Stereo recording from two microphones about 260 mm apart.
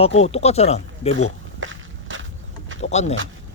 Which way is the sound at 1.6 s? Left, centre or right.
Right.